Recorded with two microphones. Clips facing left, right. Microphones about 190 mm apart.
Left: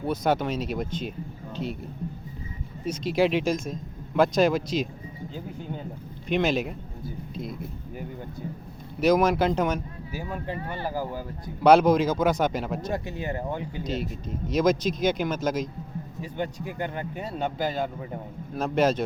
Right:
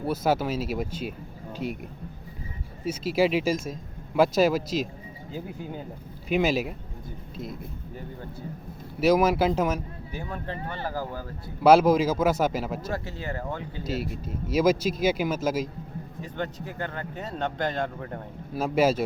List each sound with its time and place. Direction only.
0.0 s speech: 5° right (ahead or behind)
2.8 s speech: 5° right (ahead or behind)
9.0 s speech: 5° right (ahead or behind)
10.2 s speech: 10° left (ahead or behind)
11.6 s speech: 5° right (ahead or behind)
12.9 s speech: 15° left (ahead or behind)
13.8 s speech: 5° right (ahead or behind)
16.2 s speech: 10° left (ahead or behind)
18.5 s speech: 5° right (ahead or behind)